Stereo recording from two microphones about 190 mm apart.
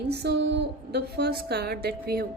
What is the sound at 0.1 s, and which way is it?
A woman's voice, 60° right (ahead or behind).